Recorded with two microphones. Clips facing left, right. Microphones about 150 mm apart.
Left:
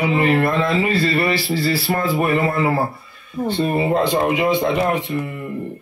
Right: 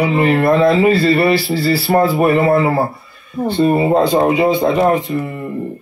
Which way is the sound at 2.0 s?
50° right (ahead or behind).